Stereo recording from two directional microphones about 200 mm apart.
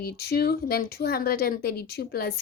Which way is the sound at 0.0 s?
50° left (ahead or behind).